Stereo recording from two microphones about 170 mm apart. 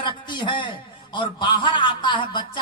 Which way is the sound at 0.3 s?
30° left (ahead or behind).